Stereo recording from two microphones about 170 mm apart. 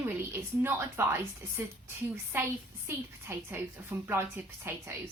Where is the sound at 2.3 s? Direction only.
15° right (ahead or behind).